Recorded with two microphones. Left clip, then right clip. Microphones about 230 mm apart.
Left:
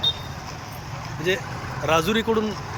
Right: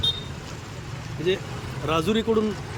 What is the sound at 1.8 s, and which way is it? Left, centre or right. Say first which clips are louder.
Speech: left 3 dB; centre.